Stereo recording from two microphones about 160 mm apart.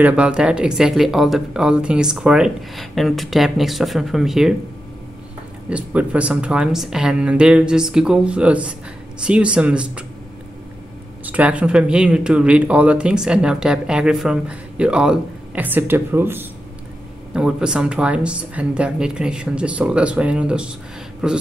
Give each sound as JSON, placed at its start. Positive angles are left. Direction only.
{"t": 0.0, "sound": "speech", "side_deg": -5}
{"t": 5.7, "sound": "speech", "side_deg": -10}
{"t": 11.2, "sound": "speech", "side_deg": -10}